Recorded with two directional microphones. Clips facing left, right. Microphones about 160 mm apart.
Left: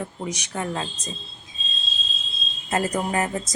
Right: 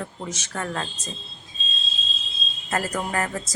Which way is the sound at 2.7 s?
20° left (ahead or behind).